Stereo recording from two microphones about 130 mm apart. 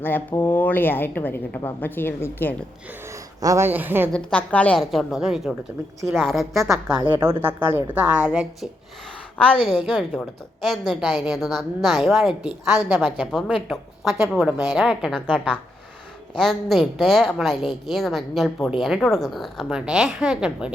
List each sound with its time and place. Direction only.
0.0 s a woman's voice: 15° left (ahead or behind)
3.4 s a woman's voice: 20° right (ahead or behind)
4.1 s a woman's voice: 10° left (ahead or behind)
7.0 s a woman's voice: 15° right (ahead or behind)
9.4 s a woman's voice: 5° left (ahead or behind)